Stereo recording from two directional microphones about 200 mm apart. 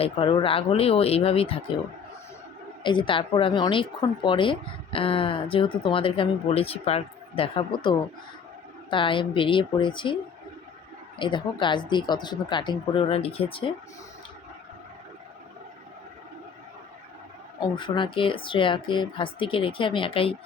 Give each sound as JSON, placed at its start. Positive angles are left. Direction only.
{"t": 0.0, "sound": "speech", "side_deg": 25}
{"t": 2.8, "sound": "speech", "side_deg": 25}
{"t": 11.2, "sound": "speech", "side_deg": 25}
{"t": 17.6, "sound": "speech", "side_deg": 25}